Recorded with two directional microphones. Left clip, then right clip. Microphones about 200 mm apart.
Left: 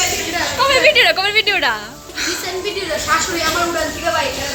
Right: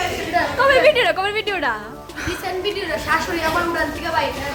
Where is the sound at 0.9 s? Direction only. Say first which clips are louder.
Left 5 dB; 10° right (ahead or behind).